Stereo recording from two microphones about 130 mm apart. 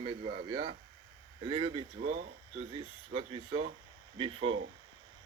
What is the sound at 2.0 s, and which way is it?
Speech, 70° right (ahead or behind).